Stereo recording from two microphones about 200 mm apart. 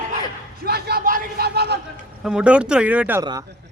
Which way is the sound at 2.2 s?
5° right (ahead or behind).